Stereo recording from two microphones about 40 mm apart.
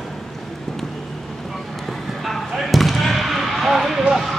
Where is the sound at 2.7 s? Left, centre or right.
Centre.